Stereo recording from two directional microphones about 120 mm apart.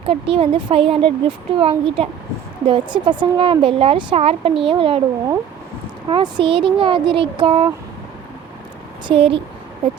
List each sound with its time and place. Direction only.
0.0 s speech: 55° right (ahead or behind)
6.1 s speech: 40° right (ahead or behind)
9.0 s speech: 50° right (ahead or behind)